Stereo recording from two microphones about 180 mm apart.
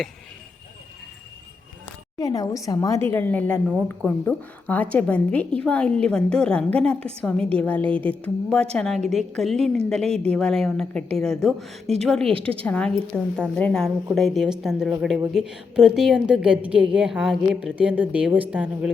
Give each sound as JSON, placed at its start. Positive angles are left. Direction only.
{"t": 2.1, "sound": "a woman's voice", "side_deg": 20}
{"t": 12.2, "sound": "a woman's voice", "side_deg": -30}
{"t": 12.6, "sound": "a woman's voice", "side_deg": 5}